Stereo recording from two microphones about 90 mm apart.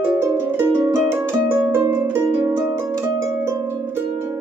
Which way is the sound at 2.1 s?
30° right (ahead or behind).